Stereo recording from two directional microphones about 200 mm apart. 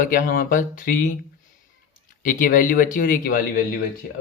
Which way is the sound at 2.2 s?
45° left (ahead or behind).